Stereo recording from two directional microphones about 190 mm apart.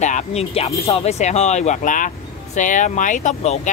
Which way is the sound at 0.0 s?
35° left (ahead or behind).